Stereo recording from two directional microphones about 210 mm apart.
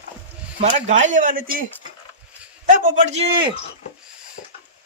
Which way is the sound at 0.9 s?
35° right (ahead or behind).